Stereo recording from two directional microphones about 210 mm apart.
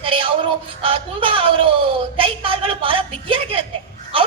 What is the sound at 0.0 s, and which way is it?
Music, 25° right (ahead or behind).